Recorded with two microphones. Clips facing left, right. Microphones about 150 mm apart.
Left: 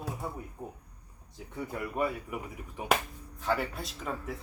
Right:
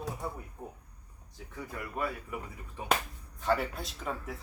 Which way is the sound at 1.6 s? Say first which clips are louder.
Left 4 dB; 20° left (ahead or behind).